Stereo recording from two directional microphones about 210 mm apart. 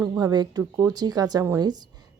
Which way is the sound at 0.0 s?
15° right (ahead or behind).